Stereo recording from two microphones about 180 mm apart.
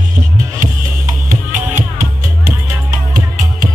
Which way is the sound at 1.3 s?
45° right (ahead or behind).